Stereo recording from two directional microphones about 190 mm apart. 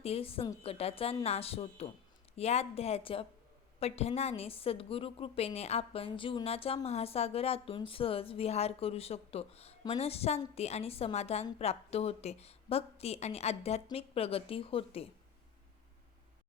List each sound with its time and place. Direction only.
0.0 s a woman's voice: 30° left (ahead or behind)